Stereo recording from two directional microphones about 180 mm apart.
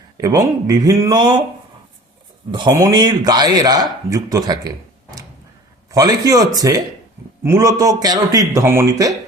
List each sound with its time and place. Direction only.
0.2 s a man's voice: 20° right (ahead or behind)
2.5 s a man's voice: 20° right (ahead or behind)
5.9 s a man's voice: 20° right (ahead or behind)